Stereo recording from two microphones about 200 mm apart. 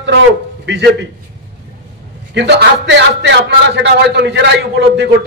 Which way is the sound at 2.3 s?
60° right (ahead or behind).